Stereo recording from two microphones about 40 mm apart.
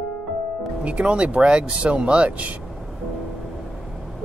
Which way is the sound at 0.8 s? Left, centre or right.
Right.